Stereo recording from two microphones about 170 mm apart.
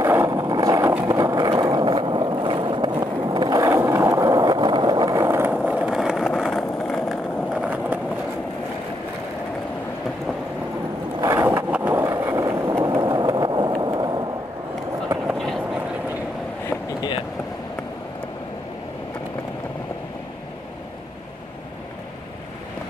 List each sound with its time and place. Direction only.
0.0 s vehicle: 15° right (ahead or behind)
11.1 s skateboard: 20° right (ahead or behind)
15.3 s train: centre (ahead or behind)